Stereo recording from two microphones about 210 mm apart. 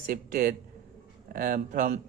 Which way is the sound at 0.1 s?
45° right (ahead or behind).